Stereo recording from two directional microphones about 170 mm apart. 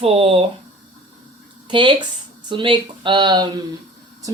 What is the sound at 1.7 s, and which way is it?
A woman's voice, 30° right (ahead or behind).